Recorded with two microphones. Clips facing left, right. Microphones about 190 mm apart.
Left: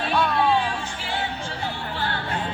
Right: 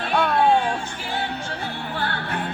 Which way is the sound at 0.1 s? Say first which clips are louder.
Right 3 dB; 55° right (ahead or behind).